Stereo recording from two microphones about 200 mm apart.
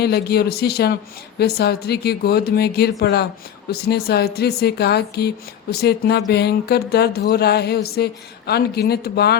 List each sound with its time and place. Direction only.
0.0 s speech: 55° left (ahead or behind)